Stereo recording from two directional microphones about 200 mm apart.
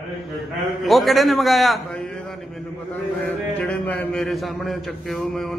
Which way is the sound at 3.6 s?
5° left (ahead or behind).